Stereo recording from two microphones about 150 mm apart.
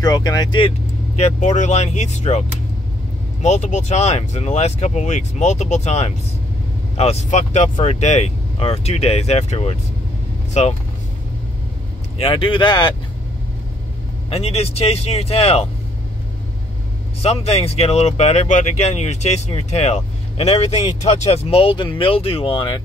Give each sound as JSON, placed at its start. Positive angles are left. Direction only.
{"t": 0.0, "sound": "speech", "side_deg": 25}
{"t": 3.4, "sound": "speech", "side_deg": 50}
{"t": 12.2, "sound": "speech", "side_deg": 35}
{"t": 14.3, "sound": "speech", "side_deg": 40}
{"t": 17.2, "sound": "speech", "side_deg": 45}